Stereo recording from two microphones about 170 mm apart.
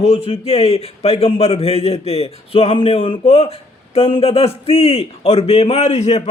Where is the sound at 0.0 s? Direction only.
35° left (ahead or behind).